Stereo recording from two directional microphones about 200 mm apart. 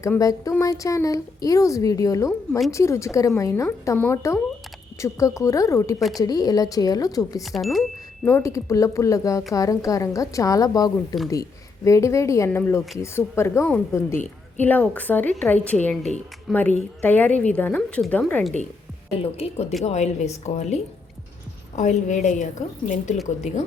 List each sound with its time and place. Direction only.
0.0 s speech: 15° left (ahead or behind)
7.4 s speech: centre (ahead or behind)
8.3 s speech: 15° left (ahead or behind)
19.2 s a woman's voice: 30° left (ahead or behind)